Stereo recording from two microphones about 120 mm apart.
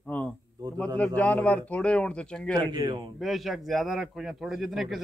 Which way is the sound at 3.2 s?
Centre (ahead or behind).